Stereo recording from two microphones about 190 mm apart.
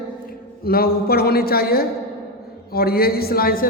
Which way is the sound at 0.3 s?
50° left (ahead or behind).